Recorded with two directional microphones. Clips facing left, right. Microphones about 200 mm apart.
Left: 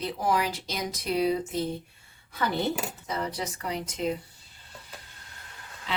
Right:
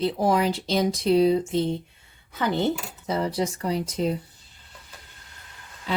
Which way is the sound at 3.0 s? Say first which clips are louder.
Right 9 dB; 30° right (ahead or behind).